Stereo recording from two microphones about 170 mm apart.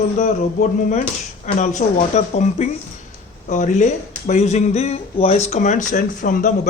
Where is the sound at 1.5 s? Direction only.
45° left (ahead or behind).